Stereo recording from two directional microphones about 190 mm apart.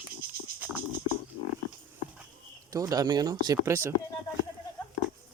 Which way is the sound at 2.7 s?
20° right (ahead or behind).